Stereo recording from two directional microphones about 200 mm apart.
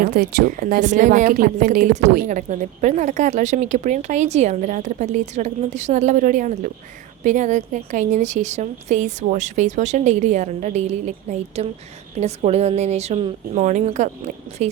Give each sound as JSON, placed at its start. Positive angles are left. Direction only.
{"t": 0.0, "sound": "speech", "side_deg": -50}